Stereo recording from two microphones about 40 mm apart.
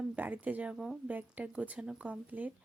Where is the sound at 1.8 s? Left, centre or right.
Centre.